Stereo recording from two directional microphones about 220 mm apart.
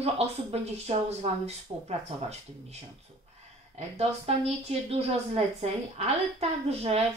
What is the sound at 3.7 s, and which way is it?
Speech, 30° right (ahead or behind).